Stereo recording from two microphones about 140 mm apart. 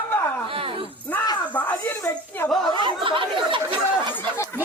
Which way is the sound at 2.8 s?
35° right (ahead or behind).